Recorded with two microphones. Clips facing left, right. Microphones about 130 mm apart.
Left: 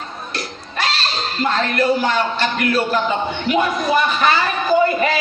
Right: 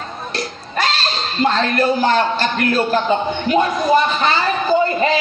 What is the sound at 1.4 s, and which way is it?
Speech, 40° right (ahead or behind).